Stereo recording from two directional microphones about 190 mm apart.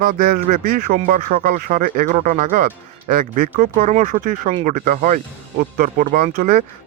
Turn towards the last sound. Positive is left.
turn(degrees=-45)  # may be behind; listen again after turning